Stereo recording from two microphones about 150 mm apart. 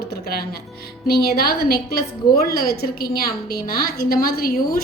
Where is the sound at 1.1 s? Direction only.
90° left.